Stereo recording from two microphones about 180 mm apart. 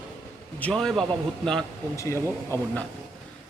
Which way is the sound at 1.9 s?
15° left (ahead or behind).